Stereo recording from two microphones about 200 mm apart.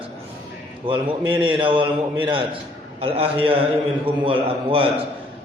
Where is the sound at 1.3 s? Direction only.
25° right (ahead or behind).